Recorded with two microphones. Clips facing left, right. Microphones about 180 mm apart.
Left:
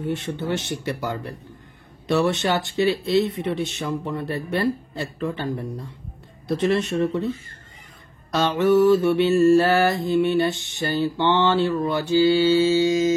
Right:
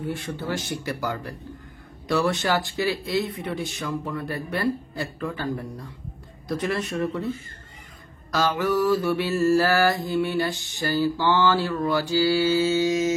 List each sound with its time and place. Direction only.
0.0 s mantra: 25° left (ahead or behind)
8.3 s mantra: 25° left (ahead or behind)